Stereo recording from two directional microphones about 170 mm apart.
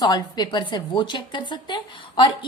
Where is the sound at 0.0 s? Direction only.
25° left (ahead or behind).